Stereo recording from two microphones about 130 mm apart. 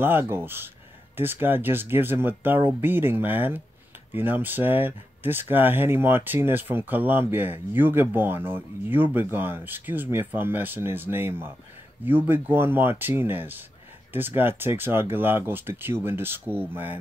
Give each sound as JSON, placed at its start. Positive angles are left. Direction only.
{"t": 0.0, "sound": "speech", "side_deg": -15}